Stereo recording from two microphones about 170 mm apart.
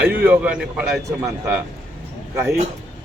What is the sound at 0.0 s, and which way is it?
A man's voice, 5° right (ahead or behind).